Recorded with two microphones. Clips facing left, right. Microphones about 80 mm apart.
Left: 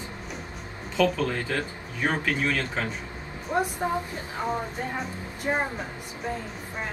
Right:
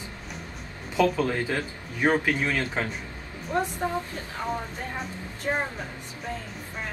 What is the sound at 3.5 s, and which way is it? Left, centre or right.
A woman's voice, centre.